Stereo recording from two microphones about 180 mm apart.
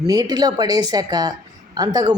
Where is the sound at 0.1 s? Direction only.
20° right (ahead or behind).